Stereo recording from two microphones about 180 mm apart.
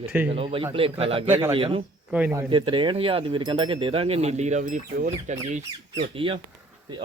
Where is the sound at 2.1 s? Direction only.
10° right (ahead or behind).